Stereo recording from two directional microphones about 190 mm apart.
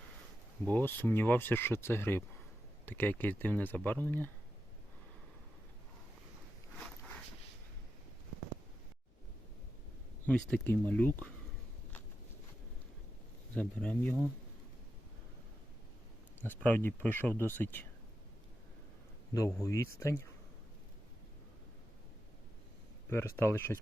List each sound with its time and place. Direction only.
0.7 s speech: 10° left (ahead or behind)
10.2 s speech: 5° left (ahead or behind)
13.5 s speech: 5° left (ahead or behind)
16.4 s speech: 10° left (ahead or behind)
19.3 s speech: 15° left (ahead or behind)
23.0 s speech: 15° left (ahead or behind)